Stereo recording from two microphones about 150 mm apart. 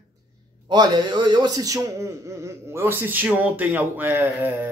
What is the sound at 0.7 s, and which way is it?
A man's voice, 30° right (ahead or behind).